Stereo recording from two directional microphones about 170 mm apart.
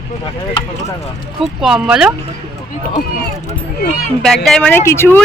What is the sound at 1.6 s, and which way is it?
Speech, 5° right (ahead or behind).